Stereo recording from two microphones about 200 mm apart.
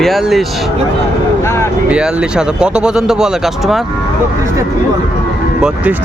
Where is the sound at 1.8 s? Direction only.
5° right (ahead or behind).